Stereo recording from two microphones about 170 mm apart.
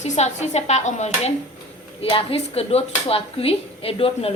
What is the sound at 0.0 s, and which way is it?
Speech, 40° left (ahead or behind).